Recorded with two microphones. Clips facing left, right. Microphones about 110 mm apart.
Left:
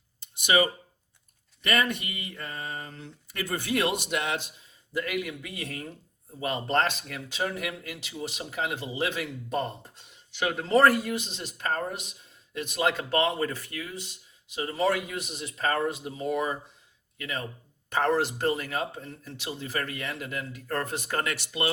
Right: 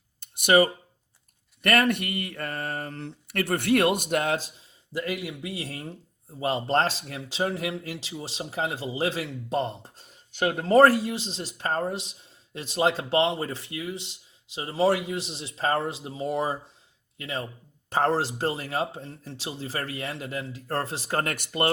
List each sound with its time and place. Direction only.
0.2 s a sound: 55° right (ahead or behind)
1.6 s a man's voice: 60° right (ahead or behind); by 9.9 s 30° right (ahead or behind)
9.9 s a man's voice: 40° right (ahead or behind)
21.3 s speech: 50° right (ahead or behind)